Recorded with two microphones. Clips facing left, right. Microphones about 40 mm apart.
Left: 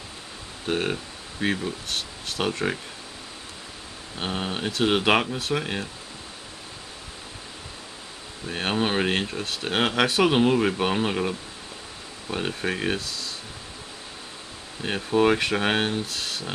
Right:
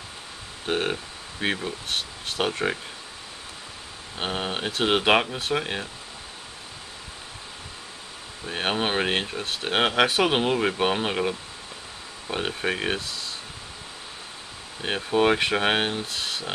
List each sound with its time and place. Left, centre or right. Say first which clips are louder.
0.7 s speech: even; centre
4.2 s speech: even; centre
5.0 s speech: right 1 dB; centre
8.5 s speech: even; centre
14.8 s speech: left 1 dB; centre